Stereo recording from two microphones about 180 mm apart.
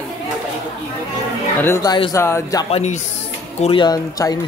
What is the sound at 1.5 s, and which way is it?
Speech, 15° left (ahead or behind).